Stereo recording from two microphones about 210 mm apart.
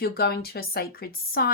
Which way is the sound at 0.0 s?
50° left (ahead or behind).